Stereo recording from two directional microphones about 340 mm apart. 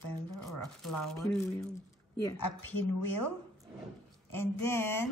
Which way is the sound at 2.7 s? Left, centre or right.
Left.